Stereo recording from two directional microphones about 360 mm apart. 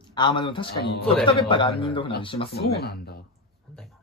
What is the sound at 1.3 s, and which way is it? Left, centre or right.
A man's voice, centre.